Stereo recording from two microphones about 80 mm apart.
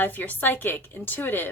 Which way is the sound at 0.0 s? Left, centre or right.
Left.